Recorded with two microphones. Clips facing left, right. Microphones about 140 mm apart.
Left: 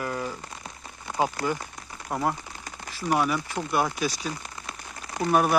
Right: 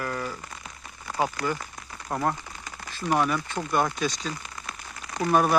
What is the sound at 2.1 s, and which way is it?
Speech, 5° left (ahead or behind).